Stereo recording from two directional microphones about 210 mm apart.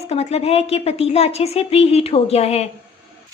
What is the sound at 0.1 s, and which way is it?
A woman's voice, 30° left (ahead or behind).